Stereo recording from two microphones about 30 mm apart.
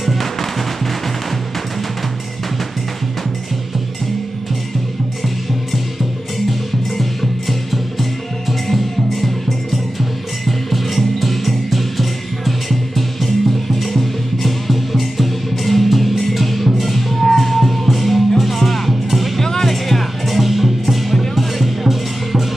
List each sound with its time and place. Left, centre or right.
0.0 s music: centre
6.5 s music: centre